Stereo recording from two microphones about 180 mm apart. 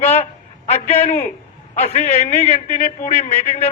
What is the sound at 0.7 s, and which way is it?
A man's voice, 35° left (ahead or behind).